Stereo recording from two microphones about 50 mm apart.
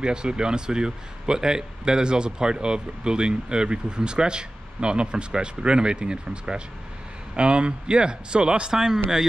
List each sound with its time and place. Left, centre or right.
0.0 s a man's voice: centre